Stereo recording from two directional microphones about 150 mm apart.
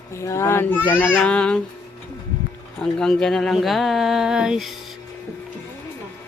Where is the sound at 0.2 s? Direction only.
20° left (ahead or behind).